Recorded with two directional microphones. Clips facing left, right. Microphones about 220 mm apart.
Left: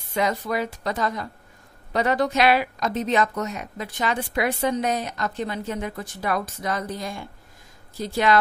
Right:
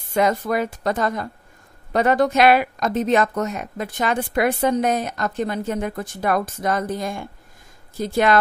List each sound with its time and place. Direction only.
0.1 s speech: 50° right (ahead or behind)